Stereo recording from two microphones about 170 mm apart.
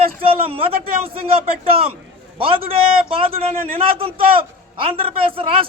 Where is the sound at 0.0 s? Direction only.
35° right (ahead or behind).